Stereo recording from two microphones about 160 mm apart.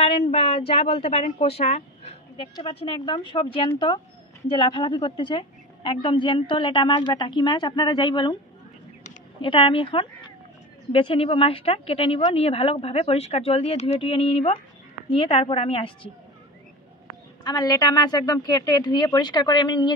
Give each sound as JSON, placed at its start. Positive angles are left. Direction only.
{"t": 0.0, "sound": "a woman's voice", "side_deg": 35}
{"t": 9.4, "sound": "a woman's voice", "side_deg": 35}
{"t": 17.4, "sound": "a woman's voice", "side_deg": 25}